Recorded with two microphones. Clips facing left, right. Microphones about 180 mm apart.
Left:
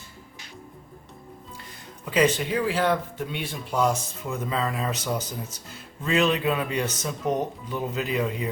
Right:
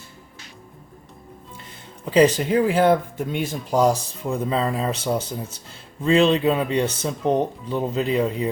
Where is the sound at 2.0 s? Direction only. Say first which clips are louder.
Right 6 dB; 35° right (ahead or behind).